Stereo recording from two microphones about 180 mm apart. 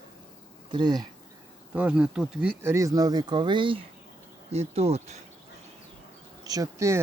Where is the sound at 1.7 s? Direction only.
5° right (ahead or behind).